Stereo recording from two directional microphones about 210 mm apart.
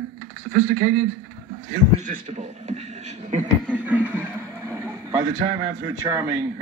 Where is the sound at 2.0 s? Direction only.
35° right (ahead or behind).